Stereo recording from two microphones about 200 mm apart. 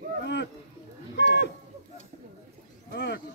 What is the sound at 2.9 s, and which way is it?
Wild animals, 60° left (ahead or behind).